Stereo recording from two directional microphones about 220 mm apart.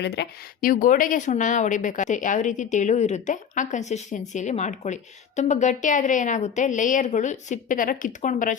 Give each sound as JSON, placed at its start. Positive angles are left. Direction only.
{"t": 0.0, "sound": "a woman's voice", "side_deg": 50}